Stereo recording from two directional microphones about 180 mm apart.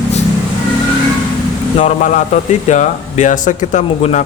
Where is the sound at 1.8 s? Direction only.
45° left (ahead or behind).